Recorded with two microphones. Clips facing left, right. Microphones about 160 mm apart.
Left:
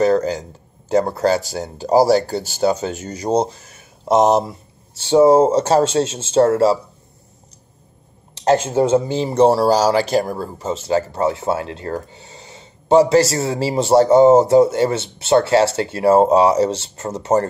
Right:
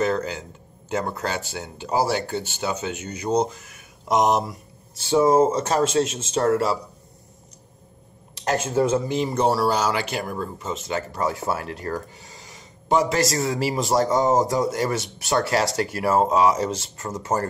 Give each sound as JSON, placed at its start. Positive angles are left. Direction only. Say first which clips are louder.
{"t": 0.0, "sound": "speech", "louder": "left 8 dB", "side_deg": 40}
{"t": 8.5, "sound": "speech", "louder": "left 6 dB", "side_deg": 25}